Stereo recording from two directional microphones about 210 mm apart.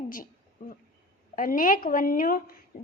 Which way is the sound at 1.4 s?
40° left (ahead or behind).